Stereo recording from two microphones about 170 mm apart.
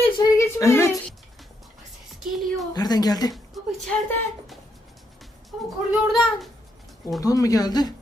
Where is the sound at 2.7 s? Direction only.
25° left (ahead or behind).